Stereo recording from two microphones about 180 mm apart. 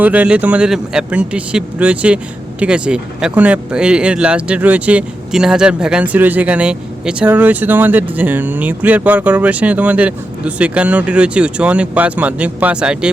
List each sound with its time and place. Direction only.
0.0 s speech: 10° right (ahead or behind)